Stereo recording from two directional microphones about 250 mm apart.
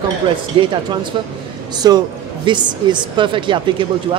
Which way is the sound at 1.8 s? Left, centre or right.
Centre.